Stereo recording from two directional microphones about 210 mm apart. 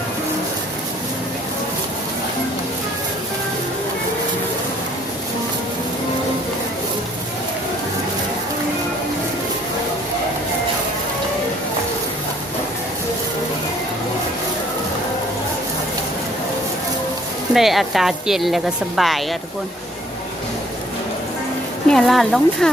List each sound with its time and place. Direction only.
17.5 s speech: centre (ahead or behind)
21.8 s speech: centre (ahead or behind)